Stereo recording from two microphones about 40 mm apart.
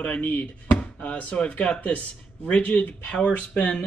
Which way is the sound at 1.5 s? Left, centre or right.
Left.